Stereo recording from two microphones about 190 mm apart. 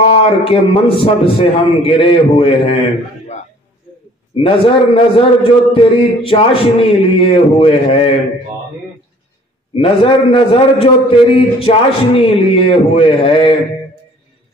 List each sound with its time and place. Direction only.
0.0 s a man's voice: 30° left (ahead or behind)
4.4 s a man's voice: 30° left (ahead or behind)
9.8 s a man's voice: 30° left (ahead or behind)